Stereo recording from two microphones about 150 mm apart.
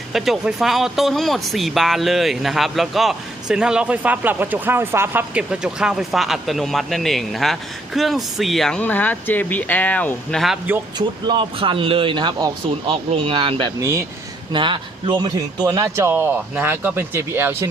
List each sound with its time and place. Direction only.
0.1 s speech: centre (ahead or behind)
10.9 s a man's voice: 30° right (ahead or behind); by 17.7 s 15° right (ahead or behind)